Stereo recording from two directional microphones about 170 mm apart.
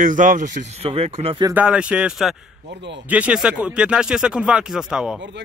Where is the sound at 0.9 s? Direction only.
35° right (ahead or behind).